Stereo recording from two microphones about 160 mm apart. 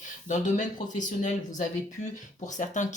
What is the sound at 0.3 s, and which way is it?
Speech, 50° left (ahead or behind).